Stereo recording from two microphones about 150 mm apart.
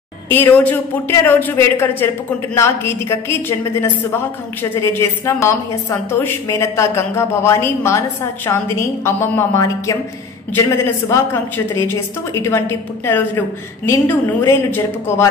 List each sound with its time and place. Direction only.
0.3 s a woman's voice: 15° left (ahead or behind)
5.2 s a woman's voice: 20° left (ahead or behind)